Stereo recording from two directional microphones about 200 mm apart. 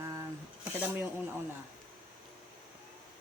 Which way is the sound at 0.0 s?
15° right (ahead or behind).